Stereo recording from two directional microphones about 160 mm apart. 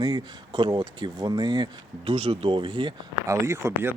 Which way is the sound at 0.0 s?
25° right (ahead or behind).